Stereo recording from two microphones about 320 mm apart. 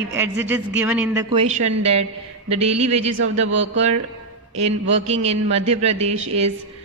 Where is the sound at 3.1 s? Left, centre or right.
Right.